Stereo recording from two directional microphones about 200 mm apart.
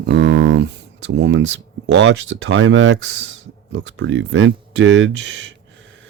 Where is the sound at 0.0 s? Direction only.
60° right (ahead or behind).